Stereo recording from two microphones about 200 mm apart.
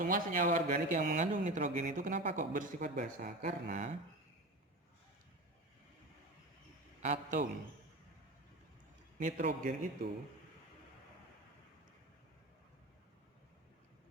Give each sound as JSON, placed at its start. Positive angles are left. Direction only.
{"t": 0.0, "sound": "a man's voice", "side_deg": -40}
{"t": 7.0, "sound": "a man's voice", "side_deg": -35}
{"t": 9.1, "sound": "a man's voice", "side_deg": -40}